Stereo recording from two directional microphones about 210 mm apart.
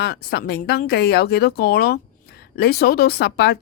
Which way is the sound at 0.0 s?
50° left (ahead or behind).